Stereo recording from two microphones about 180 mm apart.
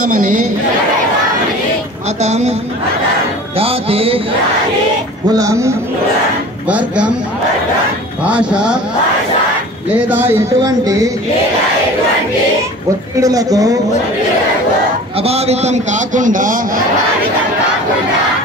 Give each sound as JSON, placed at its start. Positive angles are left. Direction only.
{"t": 0.1, "sound": "a man's voice", "side_deg": -50}
{"t": 2.2, "sound": "music", "side_deg": -40}
{"t": 3.5, "sound": "music", "side_deg": -30}
{"t": 5.3, "sound": "speech", "side_deg": -20}
{"t": 8.2, "sound": "speech", "side_deg": -5}
{"t": 10.0, "sound": "speech", "side_deg": -10}
{"t": 13.2, "sound": "speech", "side_deg": -20}
{"t": 15.1, "sound": "a man's voice", "side_deg": -35}